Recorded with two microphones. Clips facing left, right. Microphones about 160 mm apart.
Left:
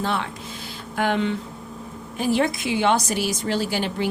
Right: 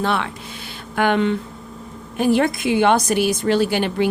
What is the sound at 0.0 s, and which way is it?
A woman's voice, 70° right (ahead or behind).